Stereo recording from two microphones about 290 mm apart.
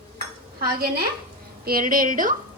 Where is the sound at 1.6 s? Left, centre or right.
Right.